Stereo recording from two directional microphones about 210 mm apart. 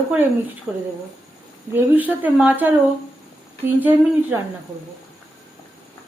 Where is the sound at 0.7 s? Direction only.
Centre (ahead or behind).